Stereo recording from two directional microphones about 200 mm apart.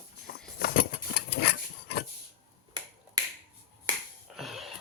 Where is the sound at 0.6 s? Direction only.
50° left (ahead or behind).